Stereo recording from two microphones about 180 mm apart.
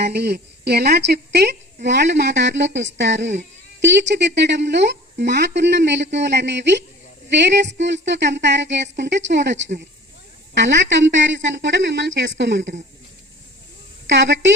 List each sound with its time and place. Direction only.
0.0 s a woman's voice: 65° right (ahead or behind); by 12.7 s 85° right
14.1 s a woman's voice: 90° right